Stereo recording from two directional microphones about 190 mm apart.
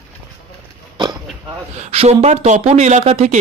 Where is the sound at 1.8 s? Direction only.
35° right (ahead or behind).